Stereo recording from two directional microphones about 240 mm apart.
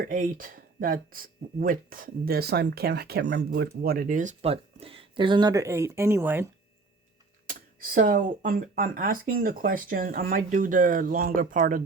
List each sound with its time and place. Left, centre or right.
0.0 s speech: right; by 6.5 s centre
7.4 s speech: right